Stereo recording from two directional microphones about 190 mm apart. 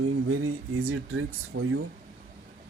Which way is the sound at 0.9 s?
90° right.